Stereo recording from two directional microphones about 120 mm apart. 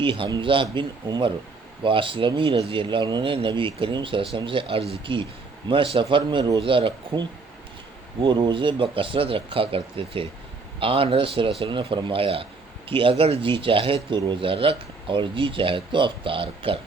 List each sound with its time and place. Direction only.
0.0 s speech: 45° right (ahead or behind)